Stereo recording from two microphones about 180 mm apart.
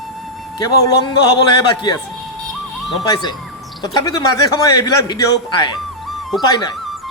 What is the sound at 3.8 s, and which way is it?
A man's voice, 20° left (ahead or behind).